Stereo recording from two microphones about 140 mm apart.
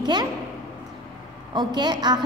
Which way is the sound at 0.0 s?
30° right (ahead or behind).